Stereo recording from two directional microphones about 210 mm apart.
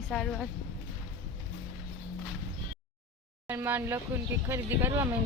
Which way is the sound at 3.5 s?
10° right (ahead or behind).